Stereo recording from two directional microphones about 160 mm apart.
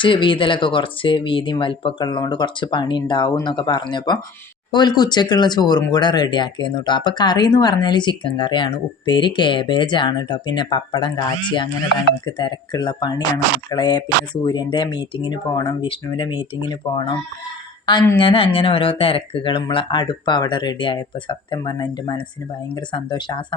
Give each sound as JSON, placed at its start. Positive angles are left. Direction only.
{"t": 0.0, "sound": "speech", "side_deg": 30}
{"t": 18.2, "sound": "speech", "side_deg": 35}